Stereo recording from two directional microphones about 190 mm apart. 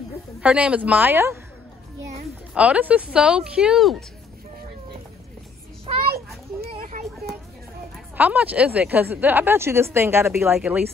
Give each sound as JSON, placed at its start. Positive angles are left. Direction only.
{"t": 0.4, "sound": "speech", "side_deg": -5}
{"t": 2.5, "sound": "speech", "side_deg": -5}
{"t": 6.8, "sound": "children playing", "side_deg": -45}
{"t": 8.2, "sound": "speech", "side_deg": -10}